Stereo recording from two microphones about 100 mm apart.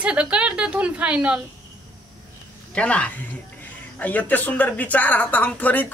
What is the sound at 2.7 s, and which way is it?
Speech, 10° left (ahead or behind).